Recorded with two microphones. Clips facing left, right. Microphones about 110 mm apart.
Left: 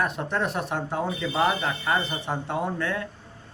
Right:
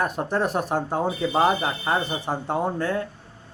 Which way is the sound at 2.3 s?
40° right (ahead or behind).